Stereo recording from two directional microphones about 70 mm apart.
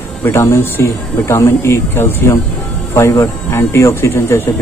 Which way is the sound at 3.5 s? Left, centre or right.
Left.